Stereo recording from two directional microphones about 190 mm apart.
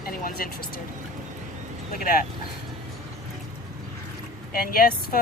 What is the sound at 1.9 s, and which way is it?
Speech, 50° left (ahead or behind).